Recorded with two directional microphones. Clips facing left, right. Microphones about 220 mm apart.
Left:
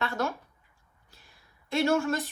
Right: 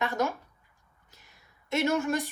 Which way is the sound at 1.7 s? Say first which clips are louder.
Left 1 dB; 20° right (ahead or behind).